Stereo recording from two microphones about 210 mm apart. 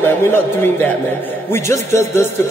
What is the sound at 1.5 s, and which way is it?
Speech, 10° left (ahead or behind).